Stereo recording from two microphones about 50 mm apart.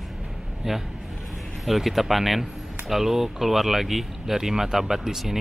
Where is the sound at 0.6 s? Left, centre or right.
Centre.